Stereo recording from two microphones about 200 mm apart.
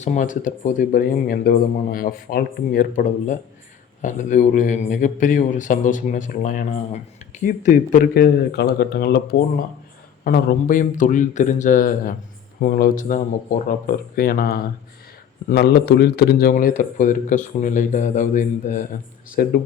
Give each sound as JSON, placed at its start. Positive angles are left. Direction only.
{"t": 0.0, "sound": "speech", "side_deg": 40}